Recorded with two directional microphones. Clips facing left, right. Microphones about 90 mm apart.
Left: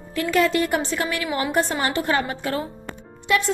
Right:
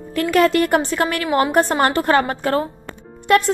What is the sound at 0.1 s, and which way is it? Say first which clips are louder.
A woman's voice: right 4 dB; 55° right (ahead or behind).